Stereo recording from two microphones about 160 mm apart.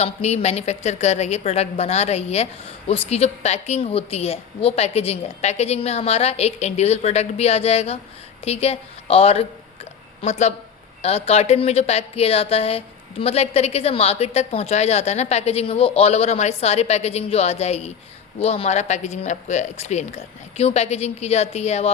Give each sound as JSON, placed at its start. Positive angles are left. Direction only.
{"t": 0.0, "sound": "a woman's voice", "side_deg": 40}